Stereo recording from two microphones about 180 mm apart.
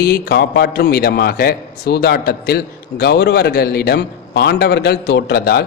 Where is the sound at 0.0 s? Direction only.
60° left (ahead or behind).